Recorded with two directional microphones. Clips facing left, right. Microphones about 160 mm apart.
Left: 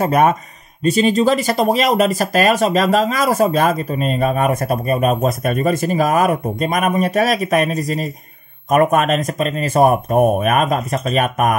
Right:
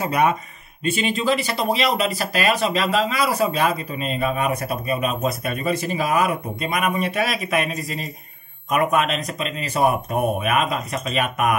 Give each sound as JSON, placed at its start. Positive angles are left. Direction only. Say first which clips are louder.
{"t": 0.0, "sound": "speech", "louder": "left 5 dB", "side_deg": 45}